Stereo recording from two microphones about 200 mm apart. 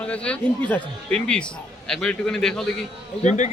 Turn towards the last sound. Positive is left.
turn(degrees=35)  # may be behind; listen again after turning